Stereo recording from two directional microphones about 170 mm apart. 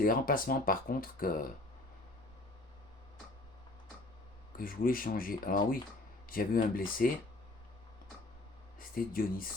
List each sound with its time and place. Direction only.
0.0 s speech: 55° left (ahead or behind)
4.5 s speech: 55° left (ahead or behind)
9.0 s speech: 55° left (ahead or behind)